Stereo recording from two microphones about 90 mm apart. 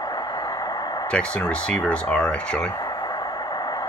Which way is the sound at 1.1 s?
15° left (ahead or behind).